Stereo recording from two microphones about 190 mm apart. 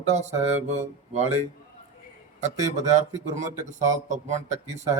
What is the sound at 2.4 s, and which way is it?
Speech, 40° right (ahead or behind).